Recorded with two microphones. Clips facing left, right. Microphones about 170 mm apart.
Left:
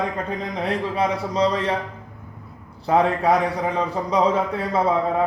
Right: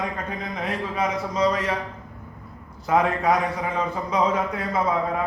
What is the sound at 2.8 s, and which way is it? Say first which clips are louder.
A man's voice: left 2 dB; 30° left (ahead or behind).